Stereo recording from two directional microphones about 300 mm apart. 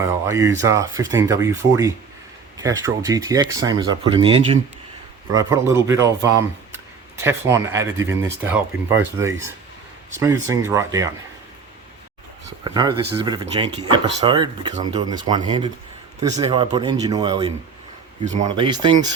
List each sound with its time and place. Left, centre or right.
0.3 s speech: centre
12.6 s speech: centre